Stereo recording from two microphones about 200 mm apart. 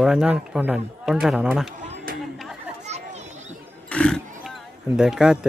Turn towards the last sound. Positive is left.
turn(degrees=-5)  # may be behind; listen again after turning